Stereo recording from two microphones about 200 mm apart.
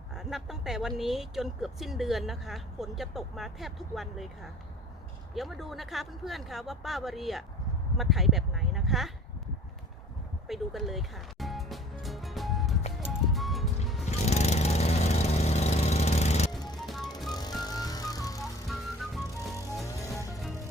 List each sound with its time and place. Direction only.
0.1 s speech: centre (ahead or behind)
5.3 s speech: centre (ahead or behind)
10.5 s music: centre (ahead or behind)
14.1 s lawn mower: 35° left (ahead or behind)
16.5 s music: 20° left (ahead or behind)
16.8 s music: centre (ahead or behind)
17.3 s music: 20° left (ahead or behind)
19.5 s music: 15° left (ahead or behind)